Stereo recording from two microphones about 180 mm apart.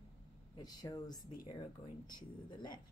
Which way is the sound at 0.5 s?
20° left (ahead or behind).